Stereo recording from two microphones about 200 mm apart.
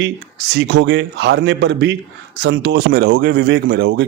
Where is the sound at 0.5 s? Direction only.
65° right (ahead or behind).